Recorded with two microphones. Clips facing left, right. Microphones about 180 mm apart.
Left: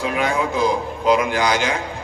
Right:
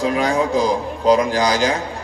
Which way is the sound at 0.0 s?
35° right (ahead or behind).